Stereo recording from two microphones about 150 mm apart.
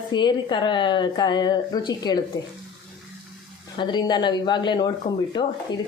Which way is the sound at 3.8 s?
30° left (ahead or behind).